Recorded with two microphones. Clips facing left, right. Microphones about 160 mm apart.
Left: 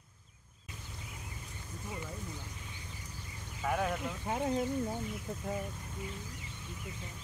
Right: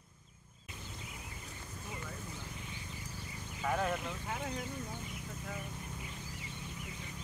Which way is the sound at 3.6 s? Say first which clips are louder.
Left 1 dB; 5° left (ahead or behind).